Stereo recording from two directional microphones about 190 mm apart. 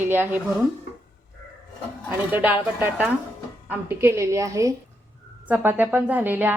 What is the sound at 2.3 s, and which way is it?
A woman's voice, 10° right (ahead or behind).